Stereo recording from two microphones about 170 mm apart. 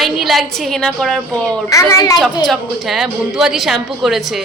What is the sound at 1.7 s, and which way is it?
Speech, 20° left (ahead or behind).